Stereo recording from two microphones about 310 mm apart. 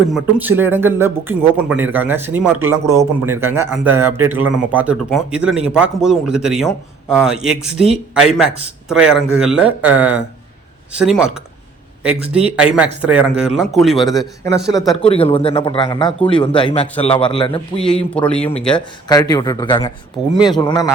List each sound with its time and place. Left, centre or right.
0.1 s a man's voice: centre
14.1 s speech: centre
16.8 s a man's voice: centre
17.1 s speech: centre
17.7 s a man's voice: centre